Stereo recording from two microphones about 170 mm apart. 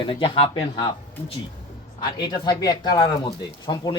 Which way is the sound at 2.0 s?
25° left (ahead or behind).